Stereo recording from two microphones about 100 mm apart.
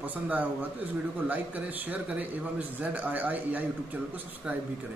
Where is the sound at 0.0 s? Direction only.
15° right (ahead or behind).